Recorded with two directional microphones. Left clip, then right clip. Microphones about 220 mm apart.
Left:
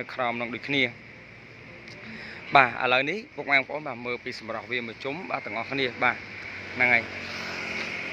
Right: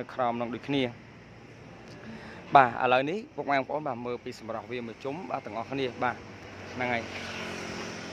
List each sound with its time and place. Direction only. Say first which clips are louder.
0.0 s speech: left 1 dB; 5° right (ahead or behind)
2.5 s a man's voice: left 1 dB; 10° right (ahead or behind)
7.5 s vehicle: left 6 dB; 55° right (ahead or behind)